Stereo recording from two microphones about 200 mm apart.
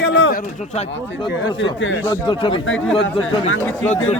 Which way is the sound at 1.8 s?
70° left (ahead or behind).